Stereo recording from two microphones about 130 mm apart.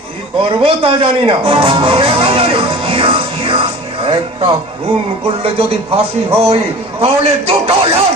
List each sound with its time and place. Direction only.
0.4 s music: 45° right (ahead or behind)
5.2 s speech: 45° right (ahead or behind)